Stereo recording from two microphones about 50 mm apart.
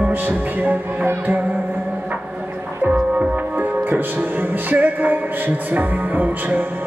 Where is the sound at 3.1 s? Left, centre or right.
Right.